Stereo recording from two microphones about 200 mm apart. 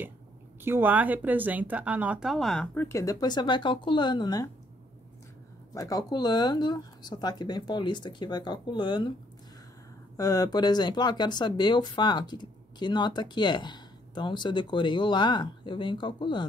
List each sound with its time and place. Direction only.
0.7 s speech: 10° right (ahead or behind); by 4.5 s 20° left (ahead or behind)
5.8 s speech: 15° left (ahead or behind)
10.1 s speech: 20° left (ahead or behind)